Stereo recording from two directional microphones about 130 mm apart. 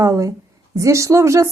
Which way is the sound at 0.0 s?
25° right (ahead or behind).